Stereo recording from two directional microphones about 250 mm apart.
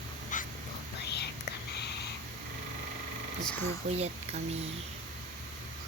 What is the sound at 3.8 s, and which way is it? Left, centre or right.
Speech, right.